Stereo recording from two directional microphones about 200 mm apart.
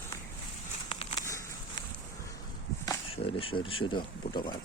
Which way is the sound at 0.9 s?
30° left (ahead or behind).